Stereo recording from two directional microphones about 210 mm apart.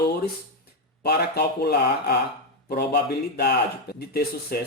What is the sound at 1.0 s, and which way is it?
Speech, 50° left (ahead or behind).